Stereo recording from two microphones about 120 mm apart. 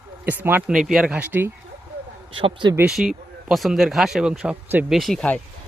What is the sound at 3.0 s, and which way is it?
Speech, centre (ahead or behind).